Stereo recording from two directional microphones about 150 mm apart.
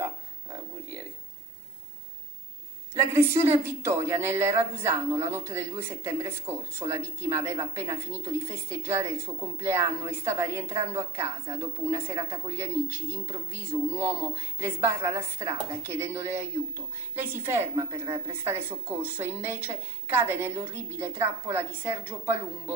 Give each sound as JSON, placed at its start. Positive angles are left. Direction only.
{"t": 2.9, "sound": "speech", "side_deg": -15}
{"t": 18.5, "sound": "speech", "side_deg": -15}